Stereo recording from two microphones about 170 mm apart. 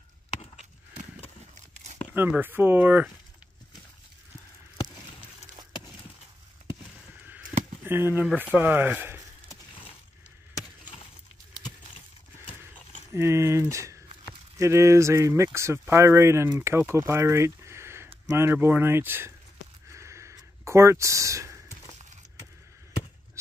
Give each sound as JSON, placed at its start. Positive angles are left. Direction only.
{"t": 2.1, "sound": "speech", "side_deg": -10}
{"t": 7.8, "sound": "speech", "side_deg": -10}
{"t": 13.1, "sound": "speech", "side_deg": -15}
{"t": 19.9, "sound": "a sound", "side_deg": -15}